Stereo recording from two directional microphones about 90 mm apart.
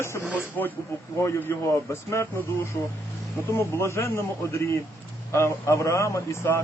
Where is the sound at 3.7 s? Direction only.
30° left (ahead or behind).